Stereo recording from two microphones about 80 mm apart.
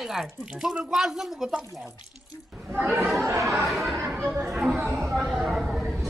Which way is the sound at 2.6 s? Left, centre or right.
Right.